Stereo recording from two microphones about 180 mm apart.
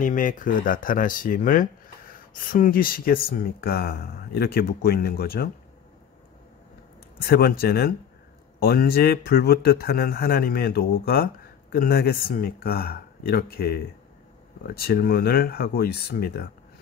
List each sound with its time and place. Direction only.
0.0 s speech: 45° left (ahead or behind)
7.2 s speech: 55° left (ahead or behind)